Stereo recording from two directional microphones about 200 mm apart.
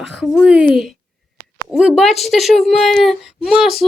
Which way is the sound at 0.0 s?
Centre (ahead or behind).